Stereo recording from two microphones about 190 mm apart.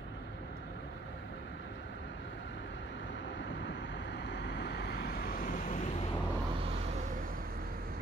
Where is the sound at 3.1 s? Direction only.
70° left (ahead or behind); by 6.1 s 35° left (ahead or behind).